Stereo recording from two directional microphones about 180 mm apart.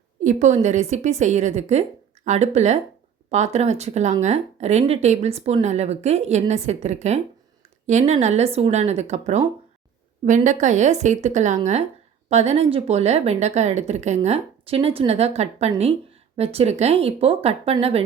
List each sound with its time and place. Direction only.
0.2 s speech: 40° right (ahead or behind)